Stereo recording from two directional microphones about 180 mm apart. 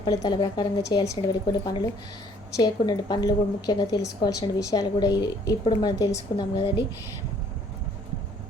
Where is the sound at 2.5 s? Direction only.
20° left (ahead or behind).